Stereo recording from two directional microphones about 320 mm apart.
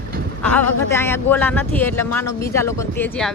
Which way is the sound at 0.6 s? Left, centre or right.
Left.